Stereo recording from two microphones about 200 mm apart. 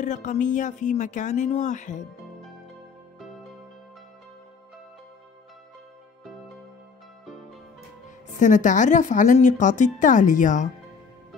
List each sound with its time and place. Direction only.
0.0 s speech: 40° left (ahead or behind)
8.3 s speech: 40° left (ahead or behind)